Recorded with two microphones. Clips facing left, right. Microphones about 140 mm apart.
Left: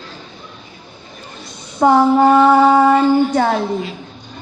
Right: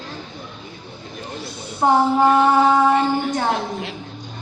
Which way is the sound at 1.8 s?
55° left (ahead or behind).